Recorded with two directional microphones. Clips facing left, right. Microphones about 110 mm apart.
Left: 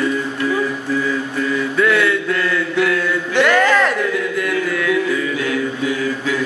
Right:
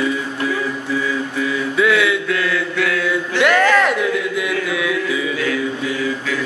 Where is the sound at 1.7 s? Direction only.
5° right (ahead or behind).